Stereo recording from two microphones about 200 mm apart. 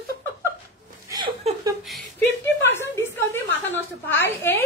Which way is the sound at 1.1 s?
25° right (ahead or behind).